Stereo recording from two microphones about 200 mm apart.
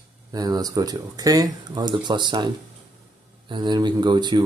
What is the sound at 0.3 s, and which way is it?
Speech, 20° right (ahead or behind).